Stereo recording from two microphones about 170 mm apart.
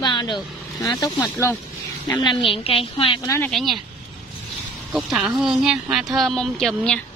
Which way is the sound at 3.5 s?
Centre (ahead or behind).